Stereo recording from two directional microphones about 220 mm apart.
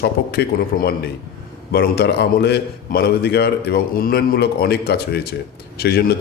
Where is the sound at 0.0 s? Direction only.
45° left (ahead or behind).